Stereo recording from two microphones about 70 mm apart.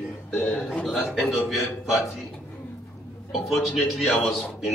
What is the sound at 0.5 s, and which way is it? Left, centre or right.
Speech, centre.